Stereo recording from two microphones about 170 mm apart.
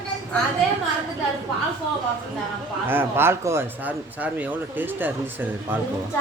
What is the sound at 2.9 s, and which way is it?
Speech, 15° right (ahead or behind).